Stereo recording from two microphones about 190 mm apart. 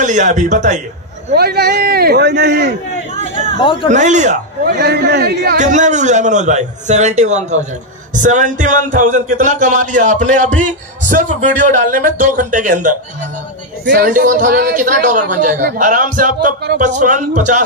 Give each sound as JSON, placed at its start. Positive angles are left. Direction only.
{"t": 0.0, "sound": "speech", "side_deg": -40}
{"t": 1.3, "sound": "speech", "side_deg": -55}
{"t": 3.5, "sound": "a man's voice", "side_deg": 25}
{"t": 3.9, "sound": "speech", "side_deg": -40}
{"t": 4.7, "sound": "speech", "side_deg": -60}
{"t": 13.9, "sound": "speech", "side_deg": -45}